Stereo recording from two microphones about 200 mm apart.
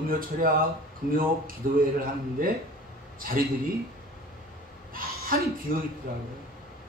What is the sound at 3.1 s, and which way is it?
Speech, 45° right (ahead or behind).